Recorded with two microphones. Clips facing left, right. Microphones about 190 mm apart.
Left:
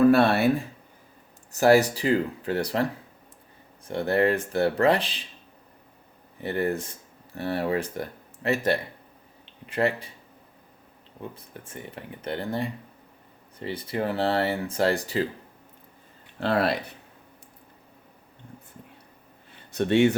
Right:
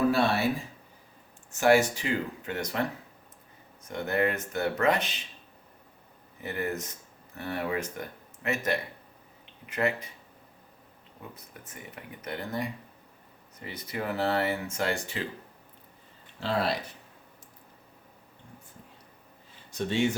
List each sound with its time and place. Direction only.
0.1 s speech: 60° left (ahead or behind)
1.5 s speech: 35° left (ahead or behind)
3.8 s speech: 30° left (ahead or behind)
6.4 s speech: 35° left (ahead or behind)
11.3 s speech: 30° left (ahead or behind)
16.4 s speech: 60° left (ahead or behind)
19.5 s speech: 60° left (ahead or behind)